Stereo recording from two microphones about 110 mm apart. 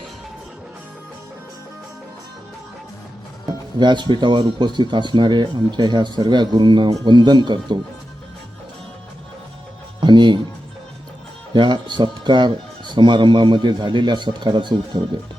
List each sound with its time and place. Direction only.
3.4 s speech: 45° right (ahead or behind)
10.0 s music: 45° right (ahead or behind)
11.5 s speech: 45° right (ahead or behind)